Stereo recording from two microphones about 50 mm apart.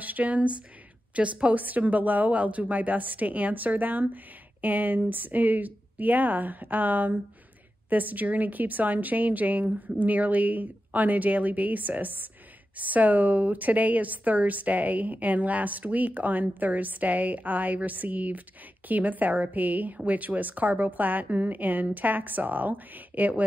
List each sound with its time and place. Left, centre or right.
0.0 s speech: right